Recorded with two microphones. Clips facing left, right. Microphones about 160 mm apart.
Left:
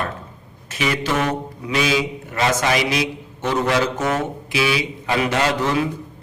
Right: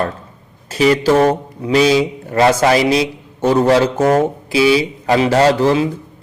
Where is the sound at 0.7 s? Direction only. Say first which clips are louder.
Right 10 dB; 35° right (ahead or behind).